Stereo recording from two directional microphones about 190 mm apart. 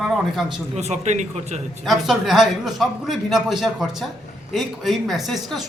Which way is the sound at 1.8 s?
Centre (ahead or behind).